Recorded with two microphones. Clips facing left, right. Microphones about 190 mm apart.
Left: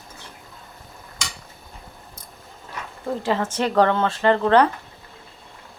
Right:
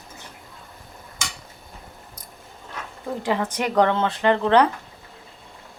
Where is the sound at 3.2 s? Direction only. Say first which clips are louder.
Left 1 dB; 15° right (ahead or behind).